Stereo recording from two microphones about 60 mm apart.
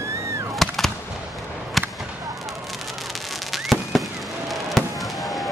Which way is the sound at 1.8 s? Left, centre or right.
Centre.